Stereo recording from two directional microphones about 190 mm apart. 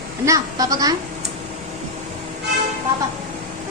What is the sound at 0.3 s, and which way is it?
Speech, 20° right (ahead or behind).